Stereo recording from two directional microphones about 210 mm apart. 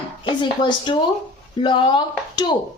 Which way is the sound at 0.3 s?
20° left (ahead or behind).